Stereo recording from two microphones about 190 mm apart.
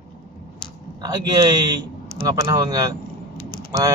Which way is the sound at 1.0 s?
20° right (ahead or behind).